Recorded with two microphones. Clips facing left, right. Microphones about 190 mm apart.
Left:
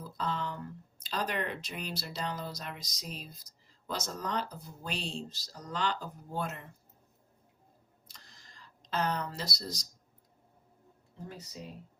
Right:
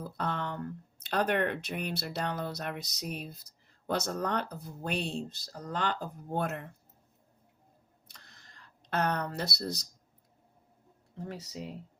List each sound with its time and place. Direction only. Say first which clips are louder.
0.0 s speech: right 1 dB; 60° right (ahead or behind)
8.0 s a sound: even; 60° right (ahead or behind)
11.2 s speech: right 5 dB; 85° right